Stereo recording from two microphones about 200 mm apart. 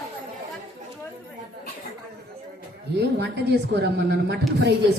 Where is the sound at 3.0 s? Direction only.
55° right (ahead or behind).